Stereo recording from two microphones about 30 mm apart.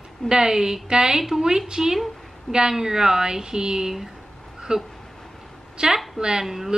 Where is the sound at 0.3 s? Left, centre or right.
Right.